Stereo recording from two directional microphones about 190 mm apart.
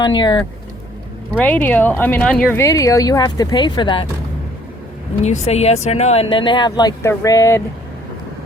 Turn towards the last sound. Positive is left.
turn(degrees=15)  # may be behind; listen again after turning